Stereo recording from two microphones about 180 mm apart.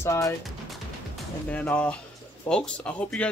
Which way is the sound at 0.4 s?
Centre (ahead or behind).